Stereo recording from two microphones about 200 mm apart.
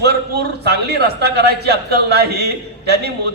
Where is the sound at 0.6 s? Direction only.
55° right (ahead or behind).